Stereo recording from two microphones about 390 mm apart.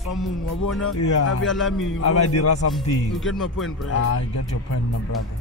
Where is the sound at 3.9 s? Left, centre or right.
Left.